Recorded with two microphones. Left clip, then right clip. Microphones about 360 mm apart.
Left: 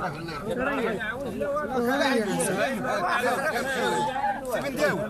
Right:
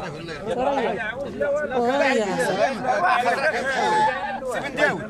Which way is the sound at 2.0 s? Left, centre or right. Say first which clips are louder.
Right 4 dB; right.